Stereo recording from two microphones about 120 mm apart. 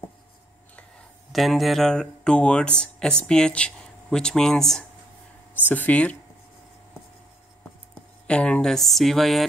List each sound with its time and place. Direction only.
1.3 s speech: centre (ahead or behind)
8.3 s speech: 10° left (ahead or behind)